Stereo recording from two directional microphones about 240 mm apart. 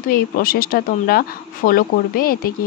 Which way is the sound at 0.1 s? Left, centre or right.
Left.